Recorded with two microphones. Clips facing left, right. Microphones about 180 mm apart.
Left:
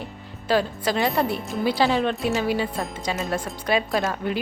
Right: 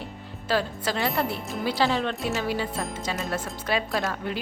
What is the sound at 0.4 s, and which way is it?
A woman's voice, 15° left (ahead or behind).